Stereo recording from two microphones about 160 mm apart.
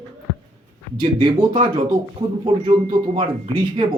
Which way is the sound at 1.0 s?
30° right (ahead or behind).